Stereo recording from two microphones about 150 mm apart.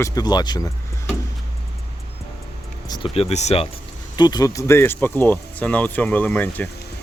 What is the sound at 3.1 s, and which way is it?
Speech, 45° left (ahead or behind).